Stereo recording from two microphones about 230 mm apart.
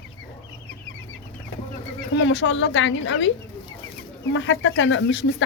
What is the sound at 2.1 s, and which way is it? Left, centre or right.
Speech, left.